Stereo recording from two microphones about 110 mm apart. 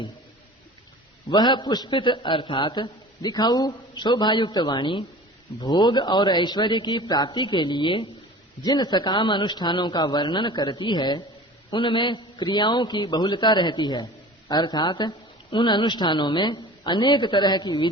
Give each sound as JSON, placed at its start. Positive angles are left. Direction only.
{"t": 1.3, "sound": "a man's voice", "side_deg": 45}